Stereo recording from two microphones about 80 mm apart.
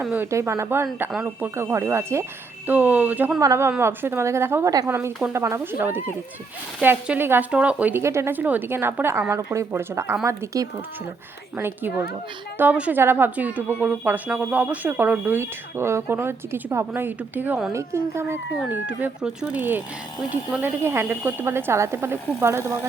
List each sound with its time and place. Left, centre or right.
0.1 s a woman's voice: right
2.6 s speech: right
3.4 s a woman's voice: right
3.8 s a woman's voice: right
5.5 s speech: right
7.5 s speech: centre
7.9 s a woman's voice: right
8.4 s a woman's voice: right
11.5 s speech: right
17.7 s a woman's voice: right
18.7 s speech: right
19.2 s speech: centre
19.5 s a woman's voice: right